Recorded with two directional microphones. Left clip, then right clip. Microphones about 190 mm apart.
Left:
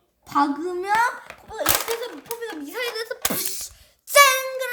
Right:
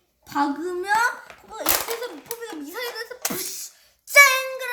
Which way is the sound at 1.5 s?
20° left (ahead or behind).